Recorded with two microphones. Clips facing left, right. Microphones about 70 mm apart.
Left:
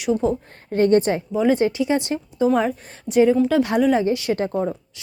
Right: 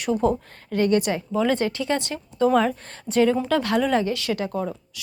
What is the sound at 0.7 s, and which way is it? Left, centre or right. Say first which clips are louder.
Speech: left 4 dB; left.